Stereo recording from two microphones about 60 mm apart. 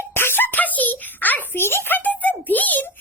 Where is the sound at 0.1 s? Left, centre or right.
Left.